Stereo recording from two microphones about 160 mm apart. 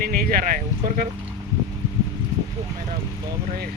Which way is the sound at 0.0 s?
65° right (ahead or behind).